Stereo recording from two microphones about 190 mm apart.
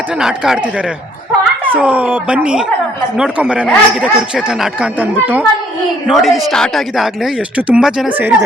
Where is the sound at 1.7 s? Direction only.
5° right (ahead or behind).